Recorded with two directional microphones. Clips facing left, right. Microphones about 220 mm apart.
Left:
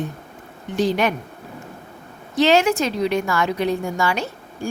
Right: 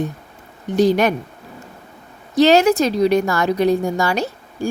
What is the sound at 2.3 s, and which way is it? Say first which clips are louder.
A woman's voice: right 4 dB; 40° right (ahead or behind).